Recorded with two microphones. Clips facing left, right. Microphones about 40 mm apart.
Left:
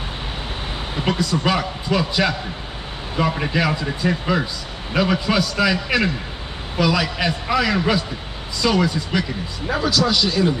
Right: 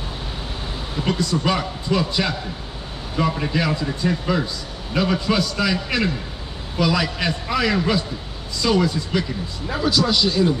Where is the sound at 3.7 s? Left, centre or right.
Left.